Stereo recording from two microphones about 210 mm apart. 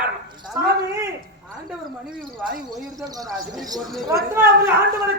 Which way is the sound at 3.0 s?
15° right (ahead or behind).